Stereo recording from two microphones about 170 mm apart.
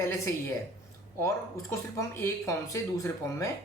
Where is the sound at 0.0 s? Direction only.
15° left (ahead or behind).